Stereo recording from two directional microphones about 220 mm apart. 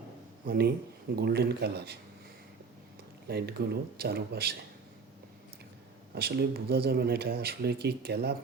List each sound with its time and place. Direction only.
0.4 s speech: 45° right (ahead or behind)
3.2 s speech: 45° right (ahead or behind)
6.1 s speech: 45° right (ahead or behind)